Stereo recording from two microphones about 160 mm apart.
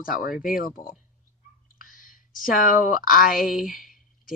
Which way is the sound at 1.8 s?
55° left (ahead or behind).